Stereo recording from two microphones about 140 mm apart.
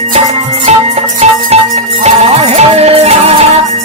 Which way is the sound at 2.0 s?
50° right (ahead or behind).